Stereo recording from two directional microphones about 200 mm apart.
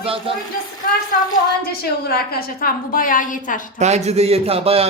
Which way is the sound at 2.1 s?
50° left (ahead or behind).